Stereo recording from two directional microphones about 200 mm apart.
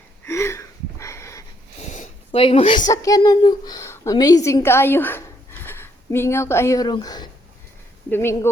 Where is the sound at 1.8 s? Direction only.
35° left (ahead or behind).